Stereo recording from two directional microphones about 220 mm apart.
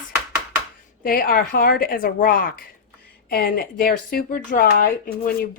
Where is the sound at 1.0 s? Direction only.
40° left (ahead or behind).